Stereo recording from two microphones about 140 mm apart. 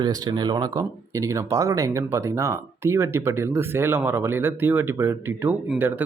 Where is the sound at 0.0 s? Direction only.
30° right (ahead or behind).